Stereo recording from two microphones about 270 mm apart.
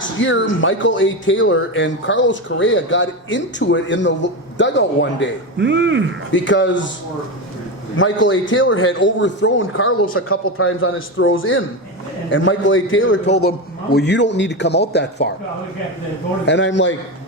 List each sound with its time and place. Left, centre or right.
0.0 s speech: left
5.5 s speech: right
6.3 s speech: left
7.9 s speech: left
16.5 s speech: left